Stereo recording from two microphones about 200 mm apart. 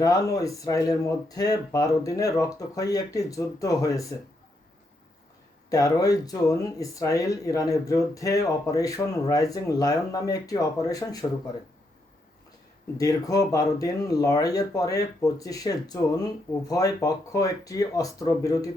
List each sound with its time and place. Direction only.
0.0 s speech: 15° left (ahead or behind)
5.6 s speech: 15° left (ahead or behind)
13.0 s speech: 15° left (ahead or behind)